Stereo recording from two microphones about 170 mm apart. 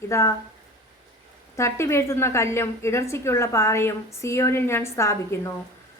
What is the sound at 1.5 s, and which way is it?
A woman's voice, 15° left (ahead or behind).